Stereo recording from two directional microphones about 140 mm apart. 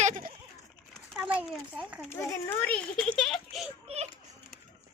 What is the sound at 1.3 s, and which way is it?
Speech, 10° right (ahead or behind).